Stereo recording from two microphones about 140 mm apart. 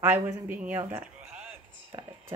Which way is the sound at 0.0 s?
15° right (ahead or behind).